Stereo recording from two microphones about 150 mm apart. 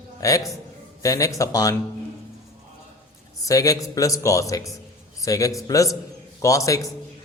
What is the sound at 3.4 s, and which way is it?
A man's voice, 20° left (ahead or behind).